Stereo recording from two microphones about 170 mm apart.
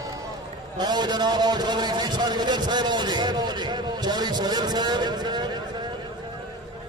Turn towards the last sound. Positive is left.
turn(degrees=-25)  # may be behind; listen again after turning